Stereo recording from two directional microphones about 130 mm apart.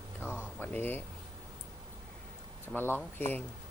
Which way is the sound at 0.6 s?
15° left (ahead or behind).